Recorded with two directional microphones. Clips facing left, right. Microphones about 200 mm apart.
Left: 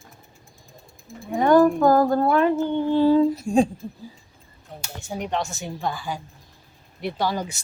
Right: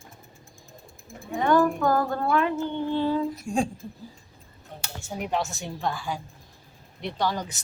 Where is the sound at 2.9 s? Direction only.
30° left (ahead or behind).